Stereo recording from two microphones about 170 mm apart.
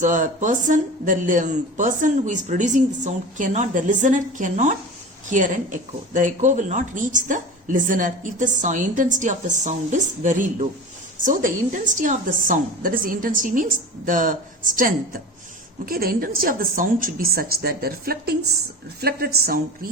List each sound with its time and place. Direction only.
0.0 s a woman's voice: 50° right (ahead or behind); by 19.9 s 65° right (ahead or behind)